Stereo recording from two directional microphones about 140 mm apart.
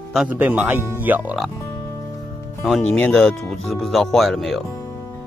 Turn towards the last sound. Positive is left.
turn(degrees=0)  # may be behind; listen again after turning